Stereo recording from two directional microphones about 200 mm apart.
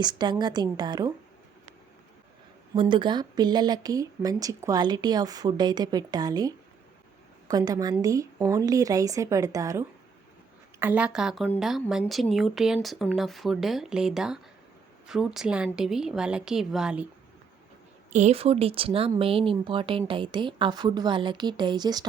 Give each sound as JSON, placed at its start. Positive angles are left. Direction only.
{"t": 0.0, "sound": "speech", "side_deg": -20}
{"t": 2.7, "sound": "a woman's voice", "side_deg": -25}
{"t": 18.1, "sound": "speech", "side_deg": -35}